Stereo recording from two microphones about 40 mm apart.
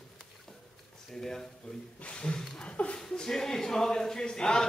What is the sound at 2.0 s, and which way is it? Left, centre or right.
Speech, left.